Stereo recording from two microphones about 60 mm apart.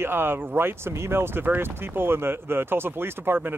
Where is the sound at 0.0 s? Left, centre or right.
Right.